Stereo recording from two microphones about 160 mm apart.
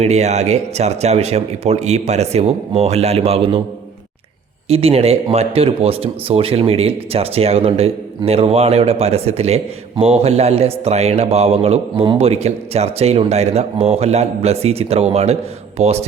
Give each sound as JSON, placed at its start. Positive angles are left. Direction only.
{"t": 0.0, "sound": "speech", "side_deg": -45}
{"t": 4.7, "sound": "a man's voice", "side_deg": -40}